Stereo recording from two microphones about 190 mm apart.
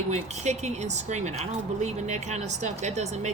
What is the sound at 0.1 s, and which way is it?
Speech, 35° right (ahead or behind).